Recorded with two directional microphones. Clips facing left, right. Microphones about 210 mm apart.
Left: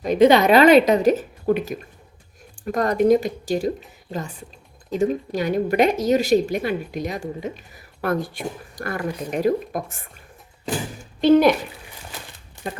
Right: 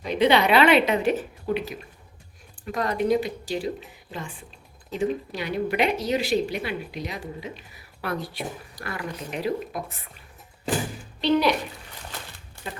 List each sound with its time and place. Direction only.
0.0 s speech: 45° left (ahead or behind)
11.2 s speech: 50° left (ahead or behind)